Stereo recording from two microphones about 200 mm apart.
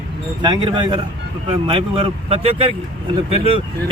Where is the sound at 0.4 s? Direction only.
25° right (ahead or behind).